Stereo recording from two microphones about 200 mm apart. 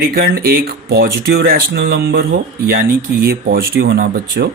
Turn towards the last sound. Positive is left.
turn(degrees=-50)  # may be behind; listen again after turning